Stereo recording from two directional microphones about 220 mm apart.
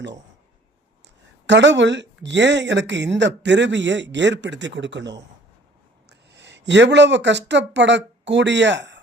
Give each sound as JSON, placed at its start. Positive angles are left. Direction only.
{"t": 1.5, "sound": "speech", "side_deg": -55}